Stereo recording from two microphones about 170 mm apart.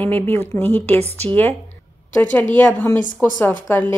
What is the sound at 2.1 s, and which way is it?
A woman's voice, 10° left (ahead or behind).